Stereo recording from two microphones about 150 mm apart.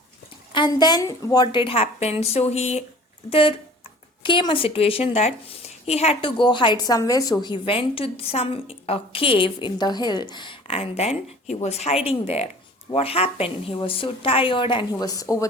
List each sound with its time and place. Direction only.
0.5 s a woman's voice: 30° left (ahead or behind)